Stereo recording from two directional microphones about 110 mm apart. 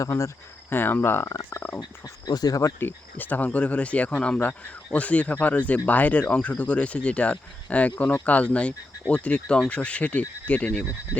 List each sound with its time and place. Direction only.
0.0 s speech: 25° left (ahead or behind)
1.8 s speech: 35° left (ahead or behind)
3.2 s speech: 15° left (ahead or behind)